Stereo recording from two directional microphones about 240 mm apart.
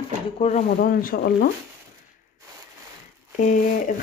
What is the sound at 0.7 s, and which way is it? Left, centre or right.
Speech, left.